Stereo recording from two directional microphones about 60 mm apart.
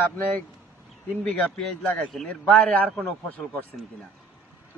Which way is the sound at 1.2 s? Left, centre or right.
Left.